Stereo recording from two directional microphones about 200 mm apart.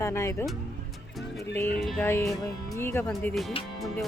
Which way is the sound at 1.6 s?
5° left (ahead or behind).